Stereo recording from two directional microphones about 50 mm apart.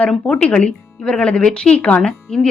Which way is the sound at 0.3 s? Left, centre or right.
Centre.